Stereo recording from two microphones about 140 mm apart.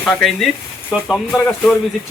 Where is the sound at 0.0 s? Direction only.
5° left (ahead or behind).